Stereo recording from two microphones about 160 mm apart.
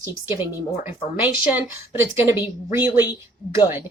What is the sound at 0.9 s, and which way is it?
A woman's voice, 10° right (ahead or behind).